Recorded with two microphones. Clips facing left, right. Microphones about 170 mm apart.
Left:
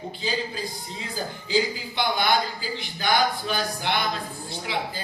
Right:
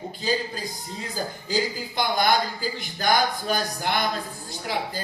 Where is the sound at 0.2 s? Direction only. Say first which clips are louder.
Right 3 dB; 45° right (ahead or behind).